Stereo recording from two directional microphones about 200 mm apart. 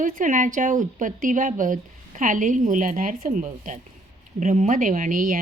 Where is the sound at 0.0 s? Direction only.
40° right (ahead or behind).